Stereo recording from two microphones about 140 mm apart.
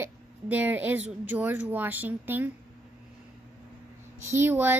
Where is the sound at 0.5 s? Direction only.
10° right (ahead or behind).